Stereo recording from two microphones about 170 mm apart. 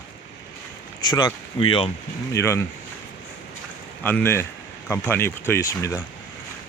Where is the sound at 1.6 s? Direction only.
30° left (ahead or behind).